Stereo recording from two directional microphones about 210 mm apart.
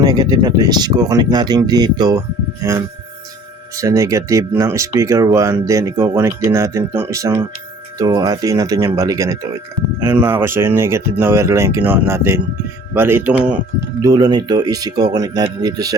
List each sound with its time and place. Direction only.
0.0 s speech: 20° right (ahead or behind)
3.8 s speech: 15° right (ahead or behind)
14.0 s speech: 20° right (ahead or behind)